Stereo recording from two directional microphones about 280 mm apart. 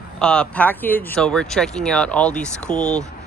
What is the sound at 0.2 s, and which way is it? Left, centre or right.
Speech, centre.